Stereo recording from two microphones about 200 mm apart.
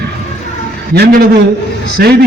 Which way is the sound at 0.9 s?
50° right (ahead or behind).